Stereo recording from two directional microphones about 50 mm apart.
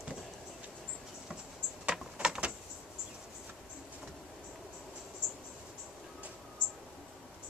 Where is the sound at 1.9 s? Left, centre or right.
Right.